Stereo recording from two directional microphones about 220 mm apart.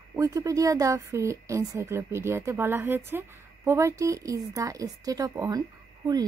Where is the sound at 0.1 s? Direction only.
15° right (ahead or behind).